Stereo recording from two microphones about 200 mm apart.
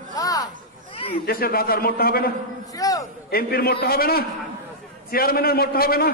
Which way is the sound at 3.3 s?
50° left (ahead or behind).